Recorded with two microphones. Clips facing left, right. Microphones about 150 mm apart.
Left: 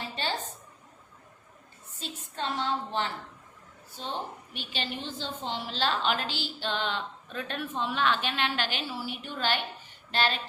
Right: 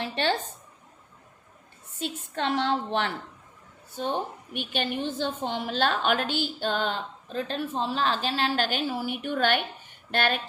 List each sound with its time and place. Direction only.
0.0 s a sound: 70° right (ahead or behind)
2.0 s a woman's voice: 65° right (ahead or behind)
3.9 s a woman's voice: 55° right (ahead or behind)